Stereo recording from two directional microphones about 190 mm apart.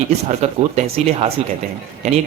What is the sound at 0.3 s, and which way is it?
A man's voice, 35° right (ahead or behind).